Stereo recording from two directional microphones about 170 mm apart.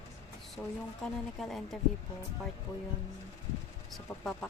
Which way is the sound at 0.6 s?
10° left (ahead or behind).